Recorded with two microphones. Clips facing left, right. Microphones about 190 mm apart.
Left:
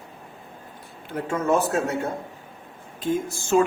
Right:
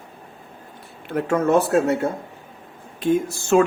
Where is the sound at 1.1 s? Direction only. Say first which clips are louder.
Right 5 dB; 65° right (ahead or behind).